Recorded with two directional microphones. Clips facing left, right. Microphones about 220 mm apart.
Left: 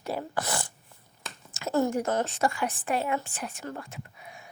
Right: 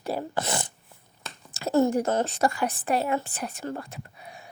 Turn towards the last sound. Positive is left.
turn(degrees=-35)  # may be behind; listen again after turning